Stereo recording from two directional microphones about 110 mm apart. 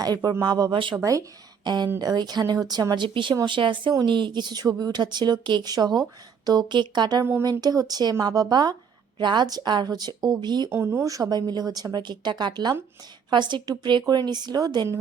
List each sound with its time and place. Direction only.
0.0 s a woman's voice: 35° right (ahead or behind)
0.9 s speech: 30° right (ahead or behind)
1.6 s a woman's voice: 40° right (ahead or behind)
10.7 s a woman's voice: 20° right (ahead or behind); by 14.8 s 40° right (ahead or behind)